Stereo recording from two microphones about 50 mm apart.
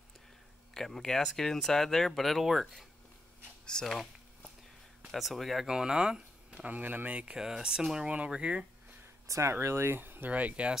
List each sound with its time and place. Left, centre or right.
0.7 s speech: centre
5.1 s speech: centre
5.7 s speech: centre
6.7 s speech: right
7.3 s speech: centre
9.3 s speech: right
9.9 s speech: right
10.3 s speech: right